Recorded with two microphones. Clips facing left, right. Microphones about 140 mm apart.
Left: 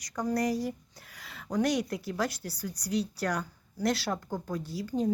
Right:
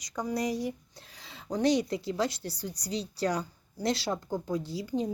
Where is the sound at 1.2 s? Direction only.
25° right (ahead or behind).